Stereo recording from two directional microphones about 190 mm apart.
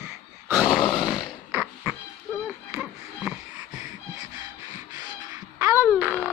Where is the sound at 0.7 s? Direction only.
20° left (ahead or behind).